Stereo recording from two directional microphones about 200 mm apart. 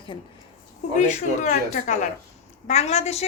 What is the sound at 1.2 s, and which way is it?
A woman's voice, 35° left (ahead or behind).